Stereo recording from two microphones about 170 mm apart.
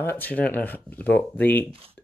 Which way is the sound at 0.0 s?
10° left (ahead or behind).